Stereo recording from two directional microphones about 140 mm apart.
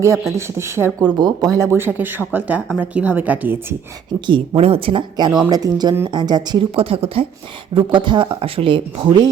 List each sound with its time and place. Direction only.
0.0 s a woman's voice: 20° right (ahead or behind)
4.3 s a woman's voice: 40° right (ahead or behind)